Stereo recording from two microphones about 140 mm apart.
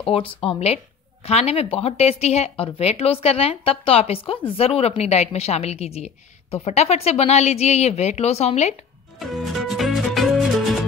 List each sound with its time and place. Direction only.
0.0 s speech: 40° left (ahead or behind)
9.2 s music: centre (ahead or behind)